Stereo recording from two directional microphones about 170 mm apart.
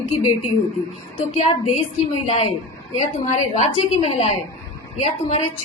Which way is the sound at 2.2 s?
40° left (ahead or behind).